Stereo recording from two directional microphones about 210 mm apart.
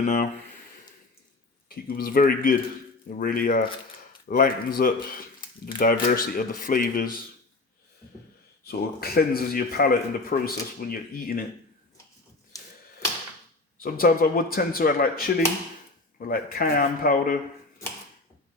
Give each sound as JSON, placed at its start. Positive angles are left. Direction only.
{"t": 0.0, "sound": "speech", "side_deg": 35}
{"t": 1.7, "sound": "a man's voice", "side_deg": 45}
{"t": 8.6, "sound": "a man's voice", "side_deg": 45}
{"t": 13.8, "sound": "a man's voice", "side_deg": 45}